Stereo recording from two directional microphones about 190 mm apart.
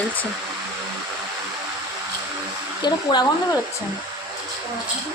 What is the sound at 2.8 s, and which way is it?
Speech, 20° left (ahead or behind).